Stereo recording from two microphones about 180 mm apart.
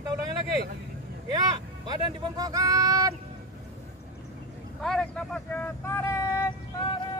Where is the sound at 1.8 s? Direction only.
25° right (ahead or behind).